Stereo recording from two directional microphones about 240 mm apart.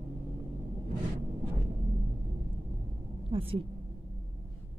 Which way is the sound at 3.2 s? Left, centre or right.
Right.